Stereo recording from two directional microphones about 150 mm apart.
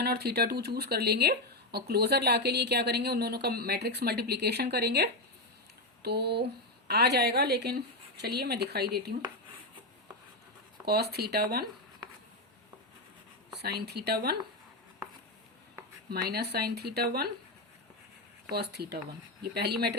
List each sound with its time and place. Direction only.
0.0 s speech: 90° right
10.8 s speech: 90° right
13.6 s speech: 90° right
16.0 s speech: 90° right
18.5 s speech: 90° right